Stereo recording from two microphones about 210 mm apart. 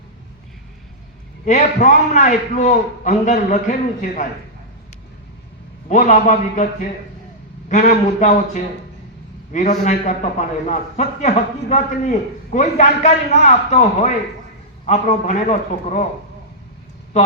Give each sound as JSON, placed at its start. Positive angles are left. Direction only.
{"t": 1.5, "sound": "a man's voice", "side_deg": 35}
{"t": 5.9, "sound": "a man's voice", "side_deg": 35}
{"t": 17.1, "sound": "speech", "side_deg": 35}